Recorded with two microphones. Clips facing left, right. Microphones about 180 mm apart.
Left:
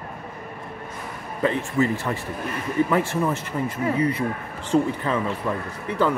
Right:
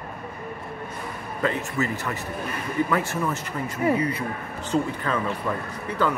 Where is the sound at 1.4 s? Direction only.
25° left (ahead or behind).